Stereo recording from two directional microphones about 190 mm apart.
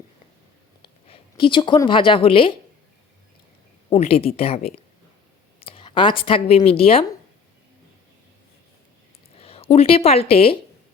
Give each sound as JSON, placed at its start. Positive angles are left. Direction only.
{"t": 0.8, "sound": "speech", "side_deg": 30}
{"t": 3.8, "sound": "a woman's voice", "side_deg": 30}
{"t": 9.4, "sound": "a woman's voice", "side_deg": 30}